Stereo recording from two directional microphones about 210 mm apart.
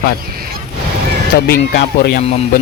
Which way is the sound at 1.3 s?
50° left (ahead or behind).